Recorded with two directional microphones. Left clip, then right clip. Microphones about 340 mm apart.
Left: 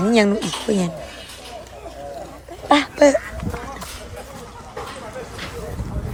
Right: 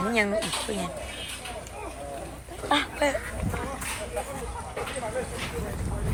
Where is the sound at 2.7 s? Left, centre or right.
Left.